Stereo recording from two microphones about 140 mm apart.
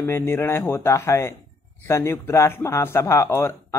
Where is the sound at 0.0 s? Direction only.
15° left (ahead or behind).